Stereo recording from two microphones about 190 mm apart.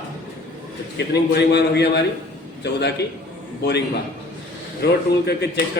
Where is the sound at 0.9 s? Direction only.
60° left (ahead or behind).